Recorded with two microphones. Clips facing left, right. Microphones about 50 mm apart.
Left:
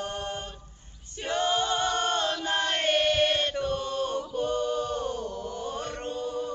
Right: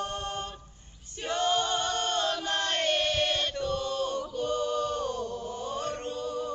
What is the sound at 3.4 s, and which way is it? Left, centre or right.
Chant, left.